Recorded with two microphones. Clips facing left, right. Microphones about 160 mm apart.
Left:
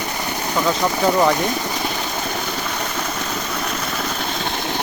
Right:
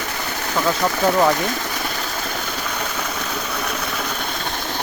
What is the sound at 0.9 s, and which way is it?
Speech, 15° left (ahead or behind).